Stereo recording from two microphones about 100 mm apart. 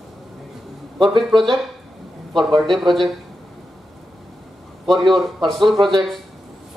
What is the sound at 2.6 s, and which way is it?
Speech, centre (ahead or behind).